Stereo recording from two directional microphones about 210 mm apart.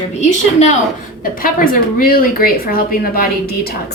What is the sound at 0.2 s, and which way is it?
A woman's voice, 35° left (ahead or behind).